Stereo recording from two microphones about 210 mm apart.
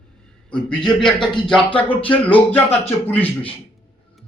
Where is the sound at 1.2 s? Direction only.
20° left (ahead or behind).